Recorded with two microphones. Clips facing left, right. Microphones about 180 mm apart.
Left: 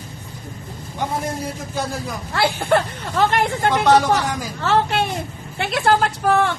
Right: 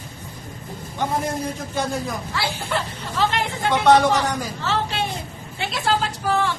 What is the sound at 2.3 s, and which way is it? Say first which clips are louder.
Speech: left 10 dB; 60° left (ahead or behind).